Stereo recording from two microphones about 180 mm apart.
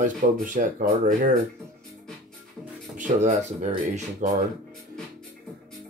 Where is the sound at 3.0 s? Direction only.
40° right (ahead or behind).